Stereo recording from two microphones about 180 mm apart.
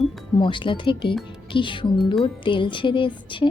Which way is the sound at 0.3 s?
25° left (ahead or behind).